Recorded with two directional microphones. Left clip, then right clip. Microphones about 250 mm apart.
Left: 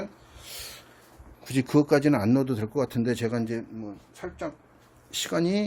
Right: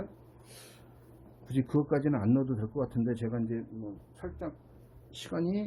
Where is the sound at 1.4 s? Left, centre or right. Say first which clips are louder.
Left 7 dB; left.